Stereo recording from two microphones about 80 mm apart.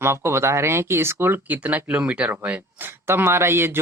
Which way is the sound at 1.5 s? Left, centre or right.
Centre.